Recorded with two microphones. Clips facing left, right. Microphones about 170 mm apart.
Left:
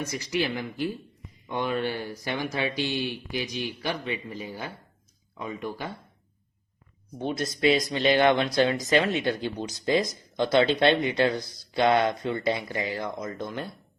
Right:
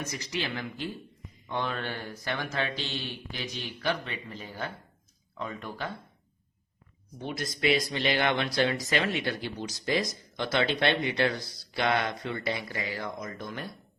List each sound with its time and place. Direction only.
0.0 s speech: 10° left (ahead or behind)
7.2 s speech: 25° left (ahead or behind)